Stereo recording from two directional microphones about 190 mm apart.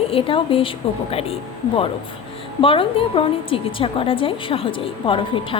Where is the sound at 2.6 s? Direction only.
30° left (ahead or behind).